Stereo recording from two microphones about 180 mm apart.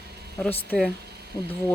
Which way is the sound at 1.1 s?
60° right (ahead or behind).